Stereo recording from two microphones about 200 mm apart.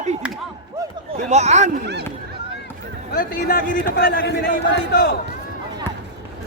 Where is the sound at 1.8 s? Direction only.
55° right (ahead or behind).